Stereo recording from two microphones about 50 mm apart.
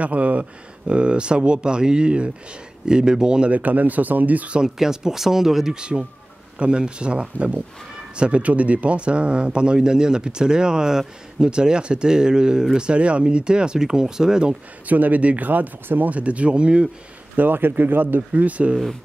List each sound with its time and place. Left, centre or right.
0.0 s speech: right
4.6 s speech: centre
14.9 s speech: right
17.4 s speech: right
18.1 s speech: right